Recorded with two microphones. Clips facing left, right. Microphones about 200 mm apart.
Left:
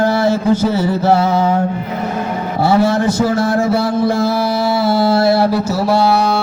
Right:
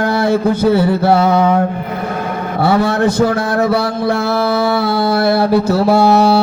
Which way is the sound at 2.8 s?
60° right (ahead or behind).